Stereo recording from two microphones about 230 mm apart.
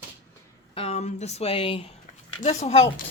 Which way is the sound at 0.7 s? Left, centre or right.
Left.